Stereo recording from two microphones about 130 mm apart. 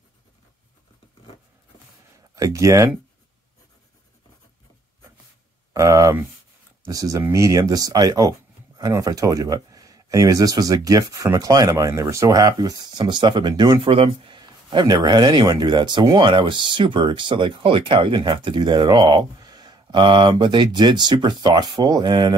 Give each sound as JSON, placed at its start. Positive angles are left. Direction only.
{"t": 2.3, "sound": "speech", "side_deg": -25}
{"t": 5.7, "sound": "speech", "side_deg": -25}